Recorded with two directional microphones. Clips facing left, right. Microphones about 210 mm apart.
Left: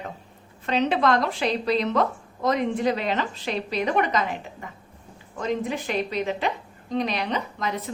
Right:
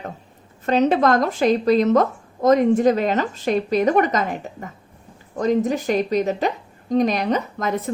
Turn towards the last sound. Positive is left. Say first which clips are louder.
# right 5 dB
turn(degrees=-50)  # may be behind; listen again after turning